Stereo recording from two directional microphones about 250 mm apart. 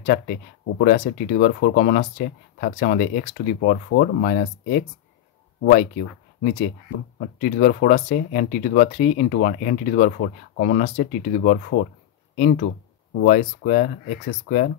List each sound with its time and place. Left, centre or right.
0.0 s speech: left
7.2 s speech: left